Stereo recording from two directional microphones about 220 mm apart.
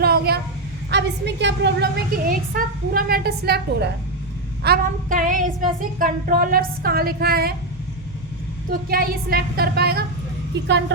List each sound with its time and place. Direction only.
0.0 s a sound: 45° right (ahead or behind)
0.9 s a woman's voice: 50° right (ahead or behind)
4.6 s child singing: 40° right (ahead or behind)
8.7 s a woman's voice: 40° right (ahead or behind)